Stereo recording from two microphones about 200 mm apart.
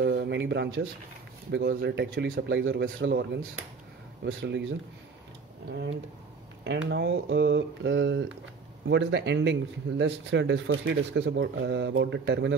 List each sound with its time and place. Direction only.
0.0 s speech: 55° right (ahead or behind)
2.6 s speech: 65° right (ahead or behind)